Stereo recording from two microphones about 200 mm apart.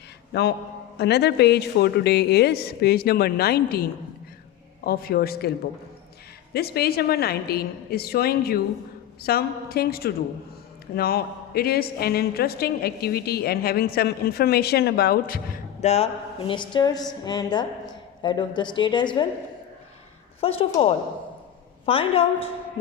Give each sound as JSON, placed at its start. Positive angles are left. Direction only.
{"t": 0.3, "sound": "a man's voice", "side_deg": 55}
{"t": 15.8, "sound": "a woman's voice", "side_deg": 30}
{"t": 20.4, "sound": "a woman's voice", "side_deg": 30}